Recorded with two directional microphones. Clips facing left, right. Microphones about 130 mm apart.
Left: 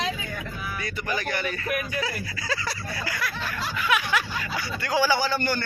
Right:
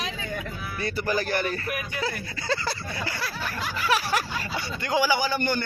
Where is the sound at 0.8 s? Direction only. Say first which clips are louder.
Right 5 dB; 35° right (ahead or behind).